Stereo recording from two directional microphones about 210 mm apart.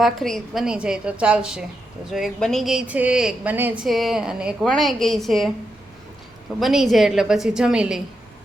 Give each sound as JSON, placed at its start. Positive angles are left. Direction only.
{"t": 0.0, "sound": "a woman's voice", "side_deg": 0}
{"t": 6.6, "sound": "a woman's voice", "side_deg": 0}